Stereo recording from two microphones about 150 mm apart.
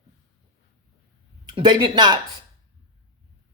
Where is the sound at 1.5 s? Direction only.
30° right (ahead or behind).